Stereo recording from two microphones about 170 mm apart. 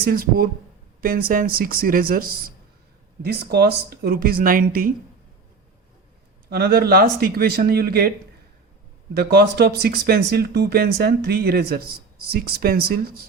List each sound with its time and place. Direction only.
0.0 s speech: 60° right (ahead or behind)
6.5 s speech: 65° right (ahead or behind)
9.1 s speech: 70° right (ahead or behind)